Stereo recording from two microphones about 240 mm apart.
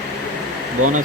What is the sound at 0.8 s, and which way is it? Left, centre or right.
Speech, right.